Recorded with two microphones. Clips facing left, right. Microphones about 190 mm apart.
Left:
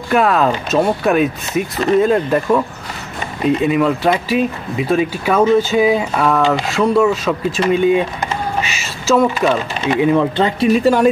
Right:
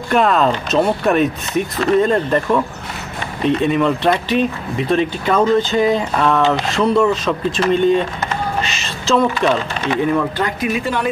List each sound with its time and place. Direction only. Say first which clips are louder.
0.1 s speech: left 1 dB; 5° left (ahead or behind); by 10.7 s 25° left (ahead or behind)
10.7 s a woman's voice: left 8 dB; 40° left (ahead or behind)